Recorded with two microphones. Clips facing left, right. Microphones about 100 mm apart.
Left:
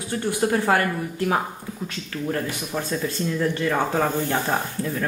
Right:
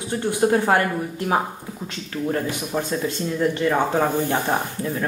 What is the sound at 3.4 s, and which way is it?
Speech, 20° right (ahead or behind).